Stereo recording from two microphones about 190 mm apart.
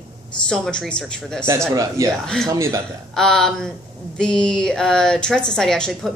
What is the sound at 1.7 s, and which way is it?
Speech, 15° right (ahead or behind).